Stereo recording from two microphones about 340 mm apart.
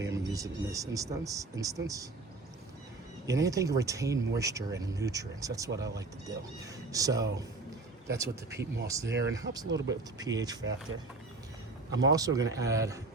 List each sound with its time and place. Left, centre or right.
0.0 s speech: centre
3.2 s speech: centre
9.0 s speech: right
9.3 s speech: centre
9.7 s speech: right
10.2 s speech: centre
11.9 s a man's voice: right
12.1 s speech: centre